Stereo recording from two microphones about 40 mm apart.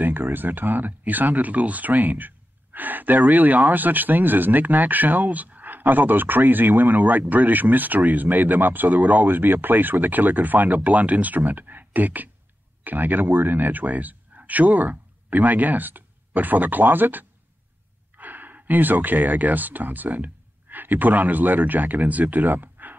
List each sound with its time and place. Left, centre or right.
0.0 s speech: right